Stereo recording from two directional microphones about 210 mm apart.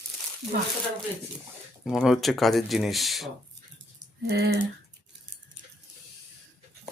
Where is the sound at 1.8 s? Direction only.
Centre (ahead or behind).